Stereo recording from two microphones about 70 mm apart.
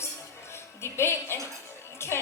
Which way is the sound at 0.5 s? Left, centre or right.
Left.